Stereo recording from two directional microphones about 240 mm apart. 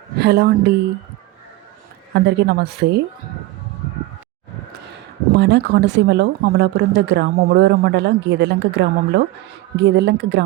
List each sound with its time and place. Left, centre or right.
0.2 s speech: right
2.1 s speech: right
5.4 s speech: right